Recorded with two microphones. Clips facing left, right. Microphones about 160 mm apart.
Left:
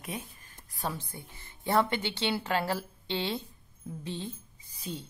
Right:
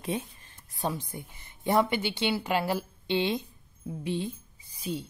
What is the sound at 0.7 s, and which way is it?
A woman's voice, 15° right (ahead or behind).